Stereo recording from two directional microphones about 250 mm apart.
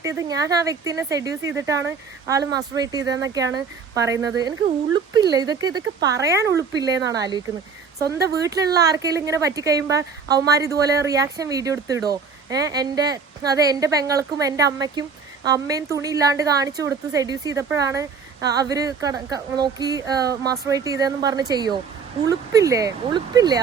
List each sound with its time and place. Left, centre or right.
0.0 s speech: centre